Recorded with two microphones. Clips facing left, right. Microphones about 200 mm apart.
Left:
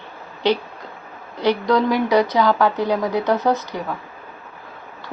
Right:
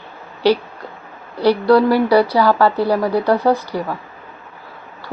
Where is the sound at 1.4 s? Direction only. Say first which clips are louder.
Right 5 dB; 10° right (ahead or behind).